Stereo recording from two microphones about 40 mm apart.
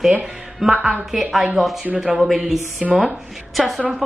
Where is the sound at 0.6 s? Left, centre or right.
Centre.